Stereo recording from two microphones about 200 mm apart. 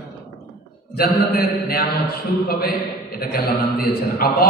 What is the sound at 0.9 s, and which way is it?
Mantra, 50° left (ahead or behind).